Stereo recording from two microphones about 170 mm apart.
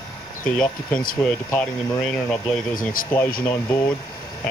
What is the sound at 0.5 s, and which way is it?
Speech, 5° left (ahead or behind).